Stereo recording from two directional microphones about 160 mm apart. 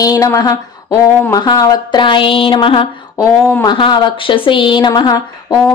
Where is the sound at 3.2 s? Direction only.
20° left (ahead or behind).